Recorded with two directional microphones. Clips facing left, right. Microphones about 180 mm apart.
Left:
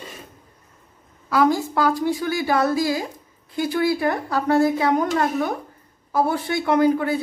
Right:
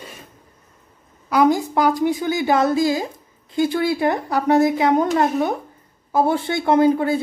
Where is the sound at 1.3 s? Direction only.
20° right (ahead or behind).